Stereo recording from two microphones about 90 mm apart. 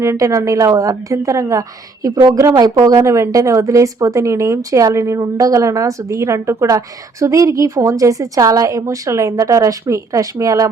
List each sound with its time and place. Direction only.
0.0 s speech: 35° right (ahead or behind)